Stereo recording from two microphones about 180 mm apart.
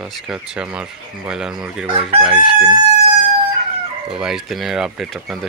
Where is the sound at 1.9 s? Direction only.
30° right (ahead or behind).